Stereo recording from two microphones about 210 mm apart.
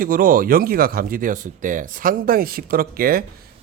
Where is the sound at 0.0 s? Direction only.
40° right (ahead or behind).